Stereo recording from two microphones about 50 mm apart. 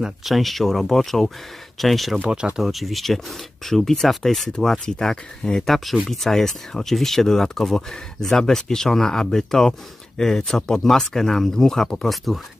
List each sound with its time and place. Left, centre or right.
0.2 s speech: centre
2.2 s speech: centre
2.6 s speech: centre